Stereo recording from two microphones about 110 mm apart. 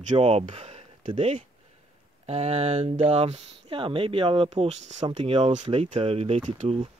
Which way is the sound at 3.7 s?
50° right (ahead or behind).